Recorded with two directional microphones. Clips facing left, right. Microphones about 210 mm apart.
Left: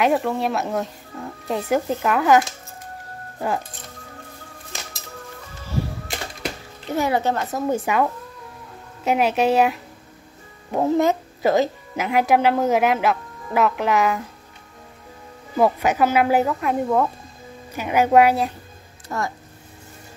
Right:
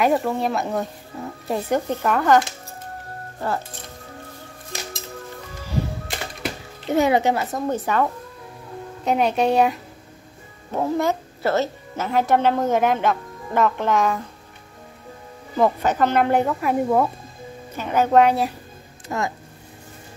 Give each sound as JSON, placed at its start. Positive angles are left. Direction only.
{"t": 0.0, "sound": "speech", "side_deg": 0}
{"t": 6.9, "sound": "speech", "side_deg": -20}
{"t": 7.3, "sound": "a woman's voice", "side_deg": 0}
{"t": 10.7, "sound": "a woman's voice", "side_deg": 20}
{"t": 15.5, "sound": "speech", "side_deg": 10}
{"t": 17.7, "sound": "a woman's voice", "side_deg": 10}
{"t": 19.0, "sound": "speech", "side_deg": -20}